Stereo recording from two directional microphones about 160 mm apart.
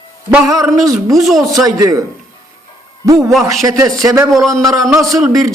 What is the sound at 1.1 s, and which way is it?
Speech, centre (ahead or behind).